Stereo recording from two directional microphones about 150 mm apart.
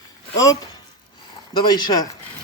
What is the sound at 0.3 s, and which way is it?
Speech, 20° left (ahead or behind).